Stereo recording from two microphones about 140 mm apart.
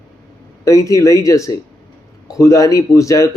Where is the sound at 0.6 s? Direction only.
25° left (ahead or behind).